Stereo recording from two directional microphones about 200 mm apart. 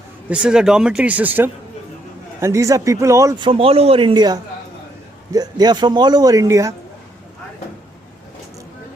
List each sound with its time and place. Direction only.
0.3 s speech: 5° right (ahead or behind)